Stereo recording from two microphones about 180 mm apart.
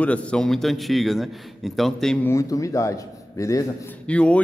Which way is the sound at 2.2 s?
15° left (ahead or behind).